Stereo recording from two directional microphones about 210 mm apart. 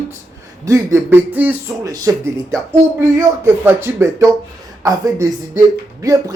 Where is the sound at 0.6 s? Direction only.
15° right (ahead or behind).